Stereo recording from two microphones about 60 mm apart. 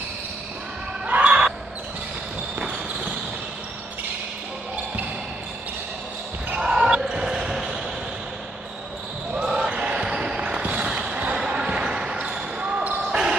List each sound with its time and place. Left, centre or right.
1.0 s basketball bounce: right
6.6 s basketball bounce: centre
9.3 s basketball bounce: centre